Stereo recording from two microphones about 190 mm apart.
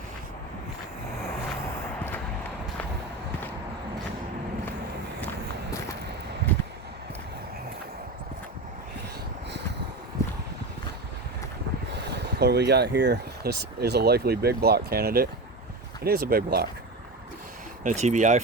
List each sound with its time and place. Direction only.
10.2 s a sound: 15° left (ahead or behind)
12.1 s speech: 60° right (ahead or behind)
17.8 s speech: 40° right (ahead or behind)